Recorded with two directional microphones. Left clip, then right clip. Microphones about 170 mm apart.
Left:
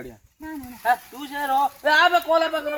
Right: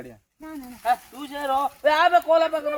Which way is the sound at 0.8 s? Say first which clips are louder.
Left 2 dB; 10° right (ahead or behind).